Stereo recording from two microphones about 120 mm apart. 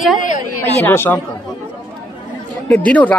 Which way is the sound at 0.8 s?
20° left (ahead or behind).